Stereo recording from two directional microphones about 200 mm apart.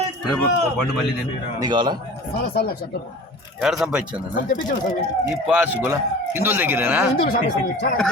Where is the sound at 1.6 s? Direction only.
20° right (ahead or behind).